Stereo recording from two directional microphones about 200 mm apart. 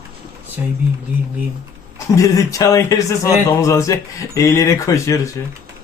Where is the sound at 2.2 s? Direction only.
15° left (ahead or behind).